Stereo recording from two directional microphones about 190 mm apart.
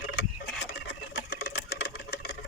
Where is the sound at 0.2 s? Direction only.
70° left (ahead or behind).